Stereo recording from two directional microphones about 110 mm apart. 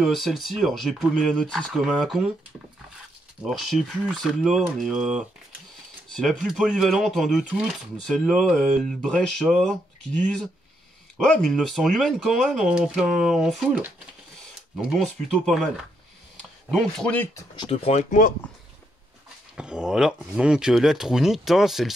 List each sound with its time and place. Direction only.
0.0 s speech: centre (ahead or behind)
3.4 s speech: centre (ahead or behind)
13.7 s speech: 15° right (ahead or behind)
15.0 s speech: centre (ahead or behind)
16.7 s speech: 10° left (ahead or behind)
17.6 s speech: 65° left (ahead or behind)
19.5 s speech: 5° right (ahead or behind)